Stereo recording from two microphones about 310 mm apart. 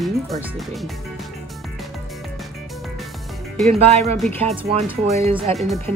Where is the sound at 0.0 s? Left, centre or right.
Centre.